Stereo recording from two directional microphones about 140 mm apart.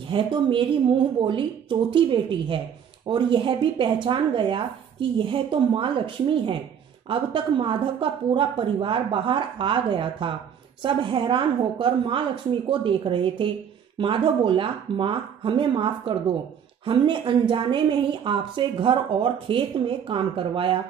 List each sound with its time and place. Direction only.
0.1 s speech: 35° right (ahead or behind)